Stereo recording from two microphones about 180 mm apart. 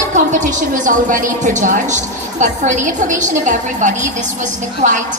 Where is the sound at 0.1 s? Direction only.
45° right (ahead or behind).